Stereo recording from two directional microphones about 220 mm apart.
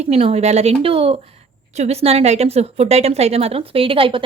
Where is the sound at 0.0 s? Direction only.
25° right (ahead or behind).